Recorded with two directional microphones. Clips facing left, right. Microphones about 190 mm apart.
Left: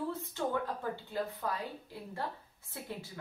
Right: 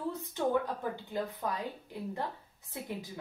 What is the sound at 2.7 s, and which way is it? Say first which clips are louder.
Speech: right 3 dB; 15° right (ahead or behind).